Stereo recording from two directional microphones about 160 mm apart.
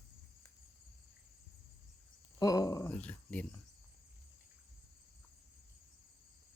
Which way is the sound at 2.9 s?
10° left (ahead or behind).